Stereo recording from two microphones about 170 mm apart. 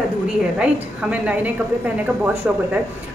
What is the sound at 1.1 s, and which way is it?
Speech, 10° right (ahead or behind).